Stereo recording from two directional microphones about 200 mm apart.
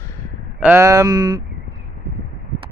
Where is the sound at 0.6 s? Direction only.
10° right (ahead or behind).